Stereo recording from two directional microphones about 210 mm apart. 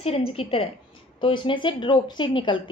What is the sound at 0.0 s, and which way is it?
A woman's voice, 30° left (ahead or behind).